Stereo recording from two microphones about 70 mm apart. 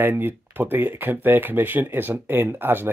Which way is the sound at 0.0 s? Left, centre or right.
Right.